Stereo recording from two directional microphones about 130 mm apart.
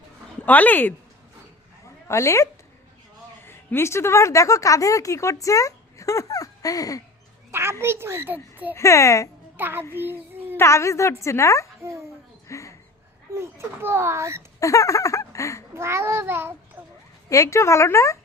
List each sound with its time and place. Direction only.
0.4 s speech: 15° left (ahead or behind)
2.0 s speech: 20° left (ahead or behind)
7.5 s speech: 20° right (ahead or behind)
8.7 s speech: 25° left (ahead or behind)
9.6 s a child's voice: 15° right (ahead or behind)
10.1 s child singing: 15° right (ahead or behind)
10.6 s speech: 20° left (ahead or behind)
11.8 s speech: 20° right (ahead or behind)
12.5 s a sound: 25° left (ahead or behind)
13.3 s speech: 20° right (ahead or behind)
14.6 s a sound: 25° left (ahead or behind)
15.7 s speech: 20° right (ahead or behind)
17.2 s speech: 25° left (ahead or behind)